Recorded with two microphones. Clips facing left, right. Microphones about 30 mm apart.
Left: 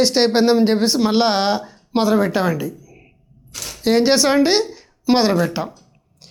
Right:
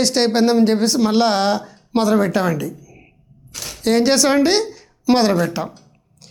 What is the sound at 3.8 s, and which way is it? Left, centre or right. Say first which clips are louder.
Speech: even; centre.